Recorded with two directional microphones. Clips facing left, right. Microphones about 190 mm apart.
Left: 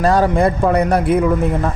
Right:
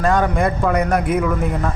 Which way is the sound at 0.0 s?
35° left (ahead or behind).